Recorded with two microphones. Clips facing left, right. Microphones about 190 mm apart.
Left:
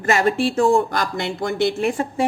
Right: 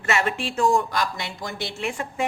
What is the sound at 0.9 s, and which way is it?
A woman's voice, 55° left (ahead or behind).